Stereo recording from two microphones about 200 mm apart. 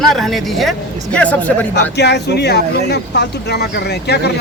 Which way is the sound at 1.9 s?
55° left (ahead or behind).